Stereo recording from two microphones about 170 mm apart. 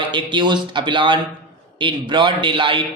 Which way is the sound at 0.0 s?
30° right (ahead or behind).